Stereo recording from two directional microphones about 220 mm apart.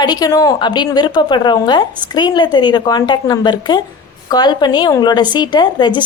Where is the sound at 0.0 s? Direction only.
20° left (ahead or behind).